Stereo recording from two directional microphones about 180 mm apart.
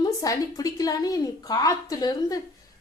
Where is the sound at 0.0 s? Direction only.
20° left (ahead or behind).